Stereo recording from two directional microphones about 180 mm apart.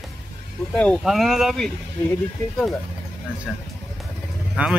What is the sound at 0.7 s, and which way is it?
Speech, 5° left (ahead or behind).